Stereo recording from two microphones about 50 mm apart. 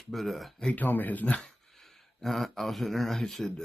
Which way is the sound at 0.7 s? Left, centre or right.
Left.